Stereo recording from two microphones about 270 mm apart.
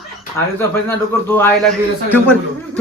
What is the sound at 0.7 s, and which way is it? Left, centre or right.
A man's voice, centre.